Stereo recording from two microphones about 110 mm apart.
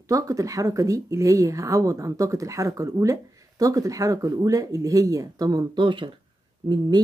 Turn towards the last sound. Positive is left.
turn(degrees=-45)  # may be behind; listen again after turning